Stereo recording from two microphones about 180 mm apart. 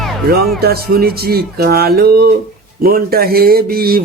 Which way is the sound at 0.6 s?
60° right (ahead or behind).